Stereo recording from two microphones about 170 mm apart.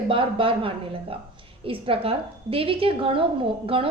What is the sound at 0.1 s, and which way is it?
A woman's voice, 30° right (ahead or behind).